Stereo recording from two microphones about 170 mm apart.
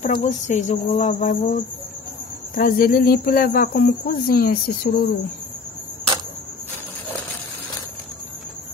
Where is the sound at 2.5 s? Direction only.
60° left (ahead or behind).